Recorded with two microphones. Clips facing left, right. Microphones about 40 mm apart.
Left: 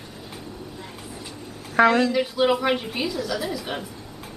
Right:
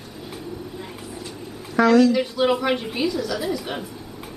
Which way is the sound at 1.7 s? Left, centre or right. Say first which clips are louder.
Right 2 dB; left.